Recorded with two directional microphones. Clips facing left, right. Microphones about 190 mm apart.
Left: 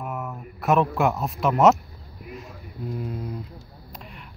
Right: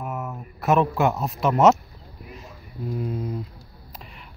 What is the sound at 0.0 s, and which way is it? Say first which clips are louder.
A man's voice: right 1 dB; centre (ahead or behind).